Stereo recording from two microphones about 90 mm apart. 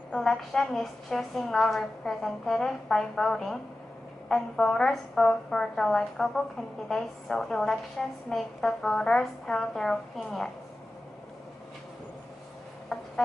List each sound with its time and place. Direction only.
0.1 s a woman's voice: 5° left (ahead or behind)
12.9 s music: centre (ahead or behind)